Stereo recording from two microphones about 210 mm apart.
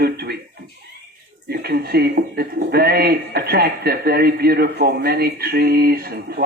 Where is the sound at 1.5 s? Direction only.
50° right (ahead or behind).